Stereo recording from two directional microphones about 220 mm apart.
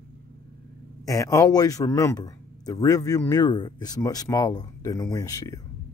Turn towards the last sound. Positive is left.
turn(degrees=15)  # may be behind; listen again after turning